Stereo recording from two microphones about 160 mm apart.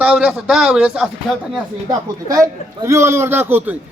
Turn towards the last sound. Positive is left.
turn(degrees=-10)  # may be behind; listen again after turning